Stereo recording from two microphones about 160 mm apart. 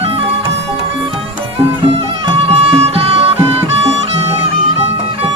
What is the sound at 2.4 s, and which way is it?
Music, 40° right (ahead or behind).